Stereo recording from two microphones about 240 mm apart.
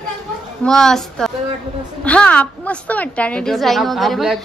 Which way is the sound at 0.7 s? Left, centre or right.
Centre.